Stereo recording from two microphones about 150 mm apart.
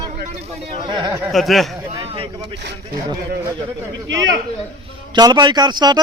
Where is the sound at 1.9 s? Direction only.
35° right (ahead or behind).